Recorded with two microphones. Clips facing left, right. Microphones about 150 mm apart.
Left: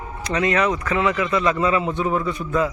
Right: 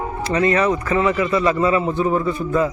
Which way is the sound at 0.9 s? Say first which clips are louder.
Right 3 dB; 5° right (ahead or behind).